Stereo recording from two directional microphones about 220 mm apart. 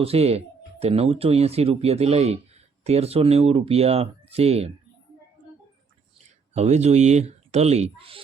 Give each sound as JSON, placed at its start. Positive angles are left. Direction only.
{"t": 0.0, "sound": "speech", "side_deg": -25}
{"t": 6.1, "sound": "speech", "side_deg": -30}